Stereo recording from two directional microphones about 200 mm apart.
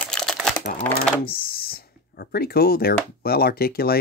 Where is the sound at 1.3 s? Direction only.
50° left (ahead or behind).